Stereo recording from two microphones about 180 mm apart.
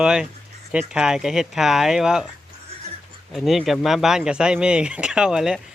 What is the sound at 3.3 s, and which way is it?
Speech, centre (ahead or behind).